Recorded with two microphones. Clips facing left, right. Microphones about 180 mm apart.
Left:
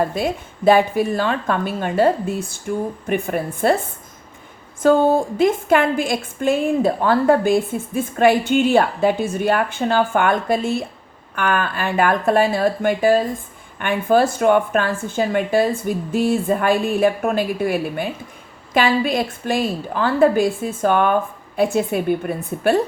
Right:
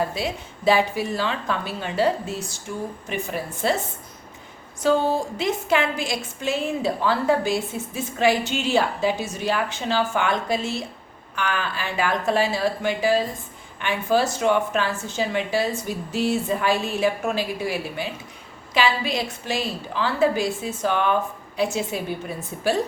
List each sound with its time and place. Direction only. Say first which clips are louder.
0.1 s a woman's voice: left 6 dB; 50° left (ahead or behind)